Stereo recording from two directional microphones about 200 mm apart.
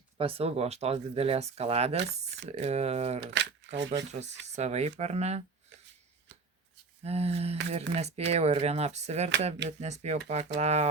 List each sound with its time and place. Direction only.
0.2 s speech: 30° right (ahead or behind)
3.4 s speech: 60° right (ahead or behind)
4.1 s speech: 35° right (ahead or behind)
7.0 s speech: 30° right (ahead or behind)